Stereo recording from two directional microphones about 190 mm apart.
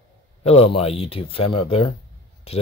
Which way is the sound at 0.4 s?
30° left (ahead or behind).